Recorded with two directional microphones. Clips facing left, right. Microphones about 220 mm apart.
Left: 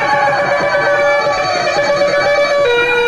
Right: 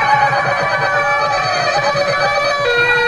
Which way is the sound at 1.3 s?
30° left (ahead or behind).